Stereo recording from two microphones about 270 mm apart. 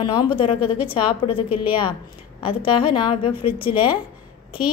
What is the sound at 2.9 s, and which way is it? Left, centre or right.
Speech, centre.